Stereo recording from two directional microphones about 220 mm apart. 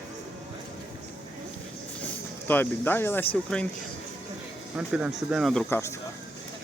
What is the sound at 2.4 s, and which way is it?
Speech, 10° left (ahead or behind).